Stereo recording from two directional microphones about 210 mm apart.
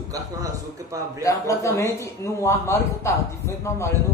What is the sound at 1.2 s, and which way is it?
Speech, 15° left (ahead or behind).